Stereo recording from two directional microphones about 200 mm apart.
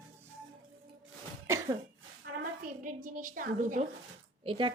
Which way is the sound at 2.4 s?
45° right (ahead or behind).